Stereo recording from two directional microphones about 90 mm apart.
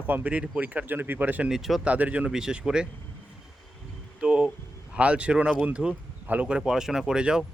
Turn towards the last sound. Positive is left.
turn(degrees=-10)  # may be behind; listen again after turning